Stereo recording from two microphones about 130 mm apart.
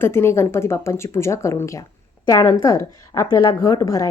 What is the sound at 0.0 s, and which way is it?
A woman's voice, 20° left (ahead or behind).